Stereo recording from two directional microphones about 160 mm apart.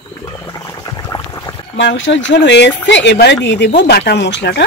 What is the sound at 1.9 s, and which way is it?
Speech, 90° left.